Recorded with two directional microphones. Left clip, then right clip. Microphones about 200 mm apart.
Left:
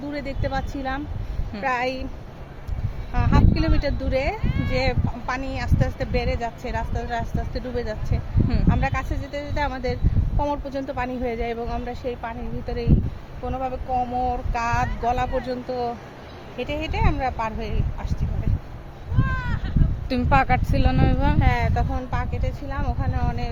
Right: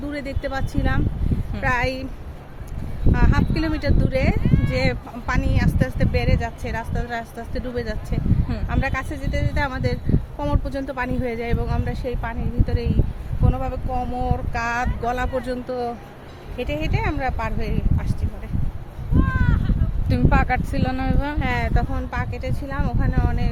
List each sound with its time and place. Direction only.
0.1 s speech: 15° right (ahead or behind)
3.1 s speech: 20° right (ahead or behind)
19.2 s a sound: 55° left (ahead or behind)
20.1 s speech: 25° left (ahead or behind)
21.3 s speech: centre (ahead or behind)